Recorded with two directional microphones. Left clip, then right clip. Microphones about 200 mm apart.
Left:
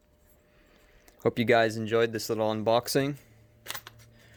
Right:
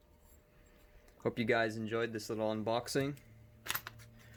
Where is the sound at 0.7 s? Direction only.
55° left (ahead or behind).